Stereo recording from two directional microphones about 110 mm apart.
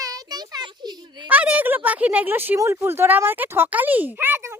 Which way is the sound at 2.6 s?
25° right (ahead or behind).